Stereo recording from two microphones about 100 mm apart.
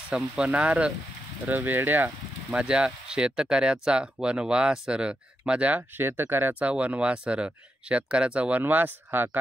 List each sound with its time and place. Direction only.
0.1 s speech: 10° right (ahead or behind)
2.5 s speech: 10° right (ahead or behind)